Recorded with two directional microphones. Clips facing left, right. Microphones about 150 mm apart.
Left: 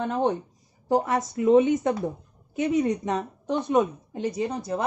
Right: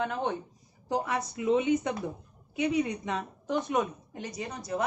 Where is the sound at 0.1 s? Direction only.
35° left (ahead or behind).